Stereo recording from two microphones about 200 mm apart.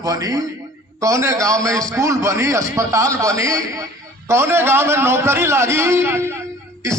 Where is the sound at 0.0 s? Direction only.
15° right (ahead or behind).